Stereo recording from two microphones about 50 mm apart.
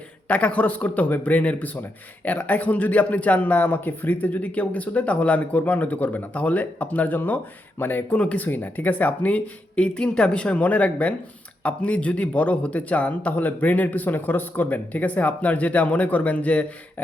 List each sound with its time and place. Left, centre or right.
0.3 s speech: left
8.2 s speech: left
8.4 s speech: left